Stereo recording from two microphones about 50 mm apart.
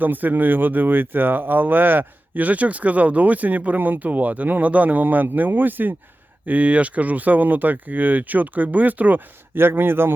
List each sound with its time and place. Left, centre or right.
0.0 s speech: right
6.4 s speech: right
9.6 s speech: right